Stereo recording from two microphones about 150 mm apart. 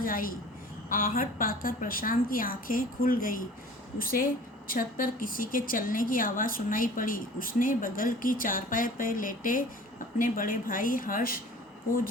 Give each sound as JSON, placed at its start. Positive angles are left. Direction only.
{"t": 0.0, "sound": "a woman's voice", "side_deg": 70}